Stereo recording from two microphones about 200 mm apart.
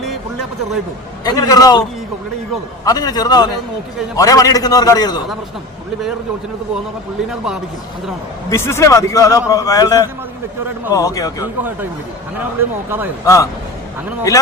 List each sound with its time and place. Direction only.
1.2 s a man's voice: 20° left (ahead or behind)
2.8 s a man's voice: 20° left (ahead or behind)
7.3 s a man's voice: 5° right (ahead or behind)
8.4 s a man's voice: 10° left (ahead or behind)
12.4 s speech: 10° right (ahead or behind)
13.2 s a man's voice: 15° left (ahead or behind)